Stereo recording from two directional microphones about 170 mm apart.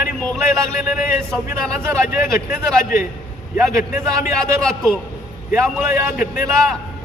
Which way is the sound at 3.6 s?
15° right (ahead or behind).